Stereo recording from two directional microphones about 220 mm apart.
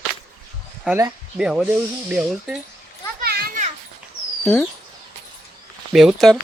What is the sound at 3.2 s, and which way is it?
Children playing, 45° right (ahead or behind).